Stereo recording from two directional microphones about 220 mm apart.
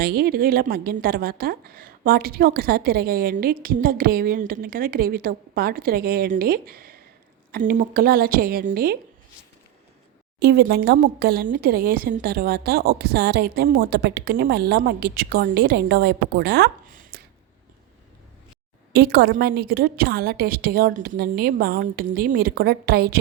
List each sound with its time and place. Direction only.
0.0 s a woman's voice: 45° right (ahead or behind)
10.4 s a woman's voice: 45° right (ahead or behind)
18.9 s a woman's voice: 45° right (ahead or behind)